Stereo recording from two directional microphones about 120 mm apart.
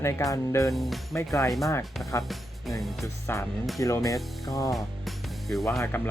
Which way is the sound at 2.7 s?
Centre (ahead or behind).